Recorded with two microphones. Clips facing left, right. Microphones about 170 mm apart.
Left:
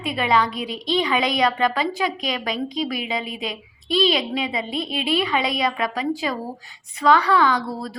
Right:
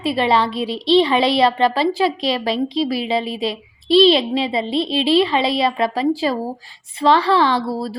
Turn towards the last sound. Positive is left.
turn(degrees=-30)  # may be behind; listen again after turning